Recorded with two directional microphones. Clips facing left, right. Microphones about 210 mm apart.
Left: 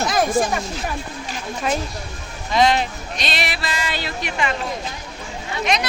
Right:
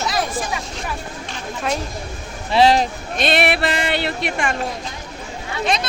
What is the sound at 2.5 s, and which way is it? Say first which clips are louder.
Speech: right 3 dB; 30° right (ahead or behind).